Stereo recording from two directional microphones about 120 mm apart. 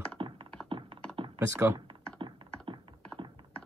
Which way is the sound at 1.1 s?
50° right (ahead or behind).